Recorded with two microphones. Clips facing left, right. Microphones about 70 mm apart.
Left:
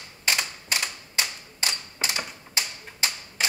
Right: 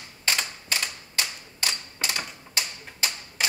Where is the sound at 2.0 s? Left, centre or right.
Left.